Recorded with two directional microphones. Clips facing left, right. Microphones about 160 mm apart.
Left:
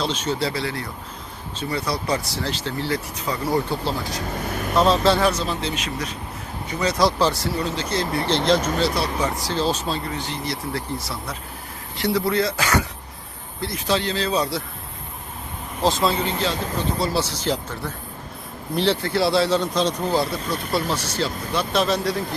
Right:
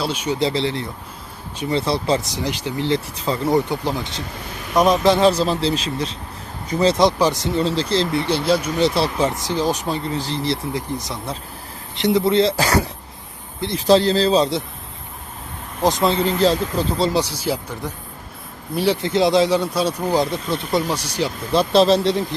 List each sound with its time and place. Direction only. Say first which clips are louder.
0.0 s speech: right 3 dB; 10° right (ahead or behind)
5.3 s speech: right 6 dB; 35° right (ahead or behind)
8.4 s speech: left 1 dB; 10° right (ahead or behind)
8.8 s speech: right 4 dB; 25° right (ahead or behind)
10.1 s speech: right 5 dB; 30° right (ahead or behind)
10.7 s speech: right 2 dB; 15° right (ahead or behind)
15.8 s speech: right 3 dB; 15° right (ahead or behind)
16.2 s speech: right 7 dB; 35° right (ahead or behind)
17.1 s speech: right 2 dB; 15° right (ahead or behind)
21.5 s speech: right 8 dB; 30° right (ahead or behind)